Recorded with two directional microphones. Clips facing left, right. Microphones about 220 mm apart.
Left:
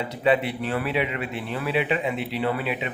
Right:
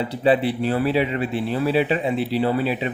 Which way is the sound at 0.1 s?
30° right (ahead or behind).